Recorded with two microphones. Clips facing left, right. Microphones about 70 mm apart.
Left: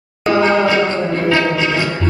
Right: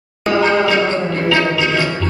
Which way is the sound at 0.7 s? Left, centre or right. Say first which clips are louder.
Even; centre.